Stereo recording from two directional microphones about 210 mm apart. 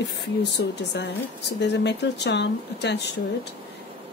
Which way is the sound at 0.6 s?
55° left (ahead or behind).